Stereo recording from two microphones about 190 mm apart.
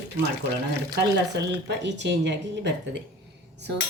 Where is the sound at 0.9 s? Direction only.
65° right (ahead or behind).